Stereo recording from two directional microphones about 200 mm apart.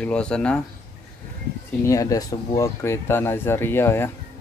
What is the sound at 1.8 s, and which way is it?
Speech, 15° left (ahead or behind).